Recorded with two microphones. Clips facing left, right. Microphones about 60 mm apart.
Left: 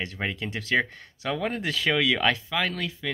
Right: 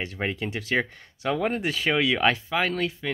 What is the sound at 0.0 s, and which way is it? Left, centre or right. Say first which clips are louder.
Speech: right 2 dB; centre.